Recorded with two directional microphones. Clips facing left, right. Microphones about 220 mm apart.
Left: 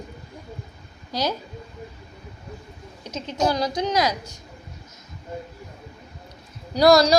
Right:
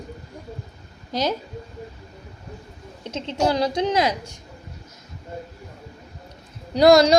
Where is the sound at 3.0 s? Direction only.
25° right (ahead or behind).